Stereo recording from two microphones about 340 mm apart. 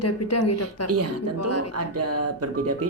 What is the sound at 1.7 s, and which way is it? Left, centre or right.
Music, right.